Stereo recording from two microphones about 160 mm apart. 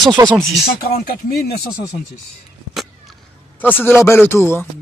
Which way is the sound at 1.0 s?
65° left (ahead or behind).